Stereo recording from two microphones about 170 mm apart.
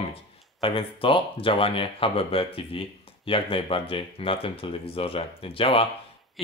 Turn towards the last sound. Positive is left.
turn(degrees=30)  # may be behind; listen again after turning